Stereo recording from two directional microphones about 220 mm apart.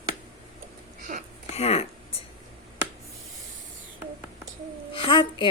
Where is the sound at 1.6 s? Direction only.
30° left (ahead or behind).